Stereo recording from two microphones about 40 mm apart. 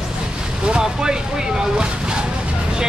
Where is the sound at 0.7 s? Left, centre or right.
Centre.